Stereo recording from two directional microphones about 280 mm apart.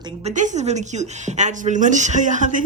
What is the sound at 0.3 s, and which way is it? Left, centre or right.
Speech, right.